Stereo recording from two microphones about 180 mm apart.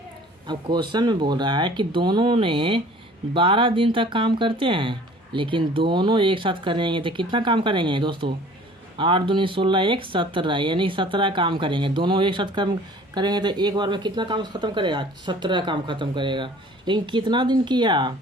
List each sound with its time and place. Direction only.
0.4 s speech: 25° right (ahead or behind)